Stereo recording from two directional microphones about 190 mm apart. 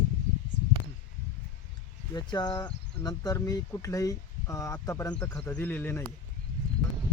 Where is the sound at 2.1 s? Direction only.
20° left (ahead or behind).